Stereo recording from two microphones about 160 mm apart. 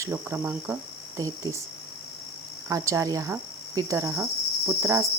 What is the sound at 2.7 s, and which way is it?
Cricket, 20° right (ahead or behind).